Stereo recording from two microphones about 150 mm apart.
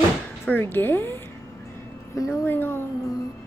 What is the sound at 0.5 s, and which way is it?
Speech, 15° left (ahead or behind).